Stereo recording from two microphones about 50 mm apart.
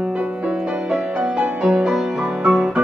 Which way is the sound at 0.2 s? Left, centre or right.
Centre.